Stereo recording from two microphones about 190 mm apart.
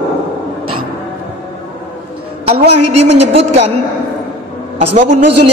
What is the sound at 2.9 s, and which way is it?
Speech, 35° right (ahead or behind).